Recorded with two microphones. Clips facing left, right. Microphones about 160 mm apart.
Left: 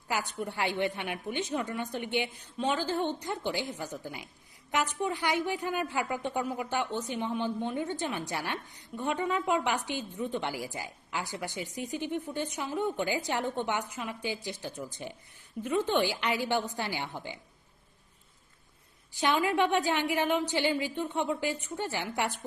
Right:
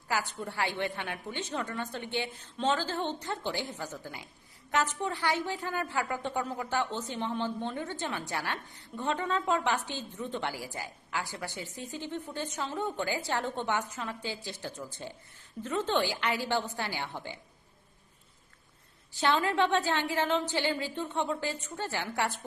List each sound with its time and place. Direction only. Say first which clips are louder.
0.1 s a woman's voice: even; 20° left (ahead or behind)
19.1 s a woman's voice: even; 15° left (ahead or behind)